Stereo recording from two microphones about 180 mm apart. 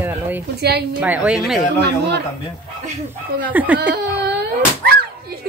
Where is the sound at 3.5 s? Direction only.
10° right (ahead or behind).